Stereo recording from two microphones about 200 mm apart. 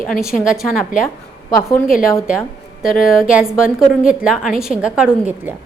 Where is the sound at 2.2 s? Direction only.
5° right (ahead or behind).